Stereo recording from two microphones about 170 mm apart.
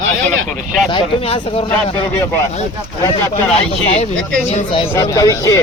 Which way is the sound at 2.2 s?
15° left (ahead or behind).